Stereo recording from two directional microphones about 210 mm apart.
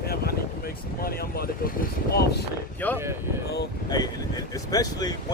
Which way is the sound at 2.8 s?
10° left (ahead or behind).